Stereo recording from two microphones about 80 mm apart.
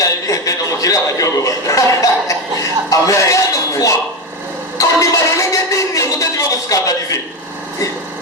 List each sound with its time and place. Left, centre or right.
0.0 s a man's voice: left
4.8 s music: left